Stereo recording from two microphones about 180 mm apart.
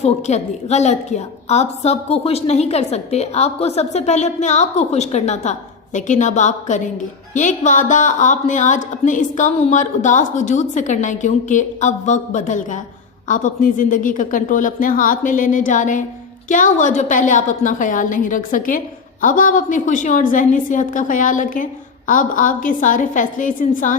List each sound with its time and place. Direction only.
0.0 s a woman's voice: 40° left (ahead or behind)